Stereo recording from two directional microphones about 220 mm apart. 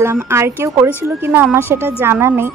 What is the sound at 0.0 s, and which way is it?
Speech, 10° right (ahead or behind).